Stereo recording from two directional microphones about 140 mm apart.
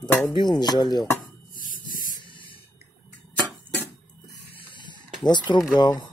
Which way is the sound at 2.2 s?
35° left (ahead or behind).